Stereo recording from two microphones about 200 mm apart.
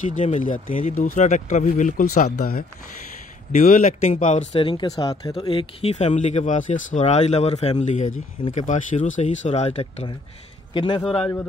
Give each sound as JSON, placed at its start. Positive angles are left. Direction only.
{"t": 0.0, "sound": "speech", "side_deg": 40}
{"t": 11.1, "sound": "a man's voice", "side_deg": 10}